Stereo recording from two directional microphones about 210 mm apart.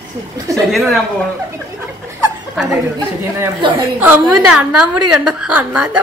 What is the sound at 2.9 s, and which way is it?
Speech, 20° right (ahead or behind).